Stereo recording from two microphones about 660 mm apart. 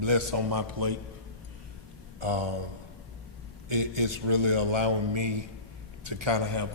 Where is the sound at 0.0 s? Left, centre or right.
Right.